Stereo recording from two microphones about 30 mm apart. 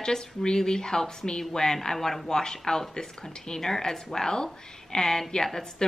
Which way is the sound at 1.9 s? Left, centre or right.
Centre.